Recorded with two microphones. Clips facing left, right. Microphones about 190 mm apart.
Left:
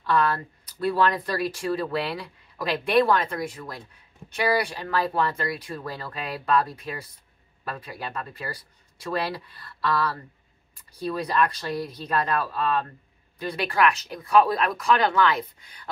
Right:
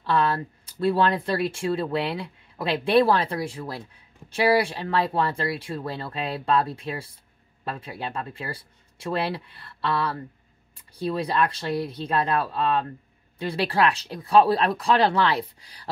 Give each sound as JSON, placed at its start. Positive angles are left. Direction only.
{"t": 0.0, "sound": "speech", "side_deg": -30}